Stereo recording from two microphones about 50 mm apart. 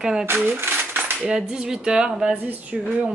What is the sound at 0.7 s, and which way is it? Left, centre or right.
Cutlery, right.